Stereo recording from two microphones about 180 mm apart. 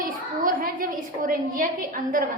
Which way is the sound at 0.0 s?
50° right (ahead or behind).